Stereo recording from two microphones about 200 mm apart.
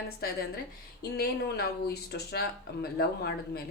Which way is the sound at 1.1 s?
50° left (ahead or behind).